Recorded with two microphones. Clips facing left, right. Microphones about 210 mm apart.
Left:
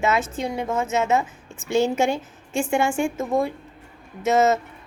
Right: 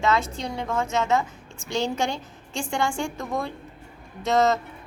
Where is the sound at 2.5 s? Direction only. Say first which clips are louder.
Left 5 dB; 5° left (ahead or behind).